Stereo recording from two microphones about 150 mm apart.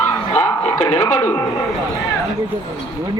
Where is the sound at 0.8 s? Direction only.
15° left (ahead or behind).